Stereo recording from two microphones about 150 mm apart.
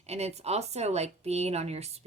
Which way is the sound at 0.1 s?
45° right (ahead or behind).